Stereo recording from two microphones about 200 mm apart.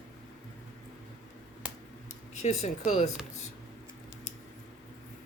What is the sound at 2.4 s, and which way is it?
Speech, 35° left (ahead or behind).